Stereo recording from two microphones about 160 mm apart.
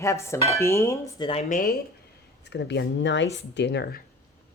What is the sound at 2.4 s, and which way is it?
Speech, 90° left.